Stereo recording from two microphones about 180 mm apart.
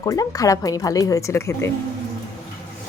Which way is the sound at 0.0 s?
20° left (ahead or behind).